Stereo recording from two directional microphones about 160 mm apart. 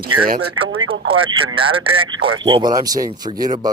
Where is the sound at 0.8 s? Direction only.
35° right (ahead or behind).